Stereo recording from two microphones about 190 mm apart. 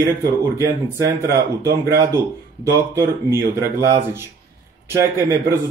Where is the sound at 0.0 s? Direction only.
15° right (ahead or behind).